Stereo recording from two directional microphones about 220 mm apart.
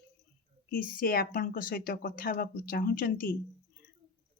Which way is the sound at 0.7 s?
40° left (ahead or behind).